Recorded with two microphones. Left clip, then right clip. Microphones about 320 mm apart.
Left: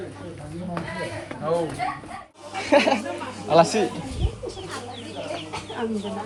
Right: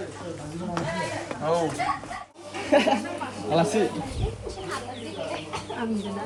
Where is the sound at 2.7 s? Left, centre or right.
Centre.